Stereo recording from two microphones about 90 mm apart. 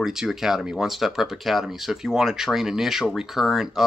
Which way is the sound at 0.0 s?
5° right (ahead or behind).